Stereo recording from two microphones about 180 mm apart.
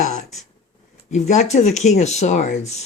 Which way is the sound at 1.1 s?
40° left (ahead or behind).